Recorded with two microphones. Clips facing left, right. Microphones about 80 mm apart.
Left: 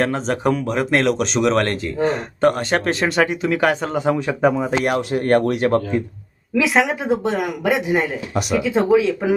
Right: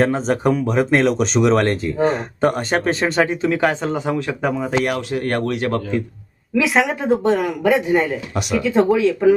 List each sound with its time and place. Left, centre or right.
0.0 s speech: centre
3.9 s speech: centre
4.4 s speech: centre
4.8 s speech: left
6.5 s speech: centre